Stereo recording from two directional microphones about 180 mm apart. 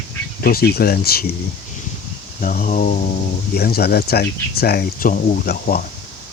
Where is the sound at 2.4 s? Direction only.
50° left (ahead or behind).